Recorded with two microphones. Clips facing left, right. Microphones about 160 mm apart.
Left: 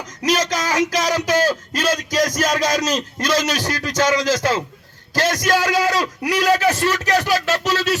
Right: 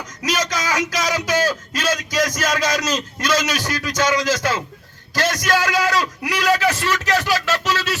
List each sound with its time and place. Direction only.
0.3 s a man's voice: 35° left (ahead or behind)